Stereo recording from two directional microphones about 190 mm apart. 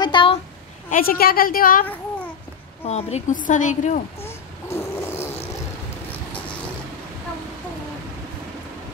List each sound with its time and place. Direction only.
0.0 s a sound: 25° left (ahead or behind)
0.8 s a woman's voice: 50° left (ahead or behind)
2.8 s a woman's voice: 35° left (ahead or behind)
4.2 s snoring: 15° left (ahead or behind)